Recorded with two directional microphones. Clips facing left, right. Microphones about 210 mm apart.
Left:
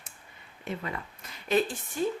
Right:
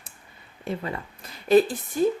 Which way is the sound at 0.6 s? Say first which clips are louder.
Right 5 dB; 35° right (ahead or behind).